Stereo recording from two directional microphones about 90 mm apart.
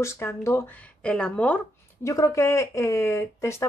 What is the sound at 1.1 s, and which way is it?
Speech, 10° left (ahead or behind).